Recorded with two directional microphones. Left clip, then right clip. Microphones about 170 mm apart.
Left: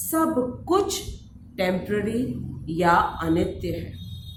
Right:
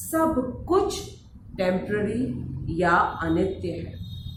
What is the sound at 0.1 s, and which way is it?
A woman's voice, 55° left (ahead or behind).